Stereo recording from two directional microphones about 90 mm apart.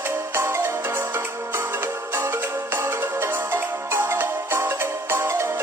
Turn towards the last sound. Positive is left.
turn(degrees=-30)  # may be behind; listen again after turning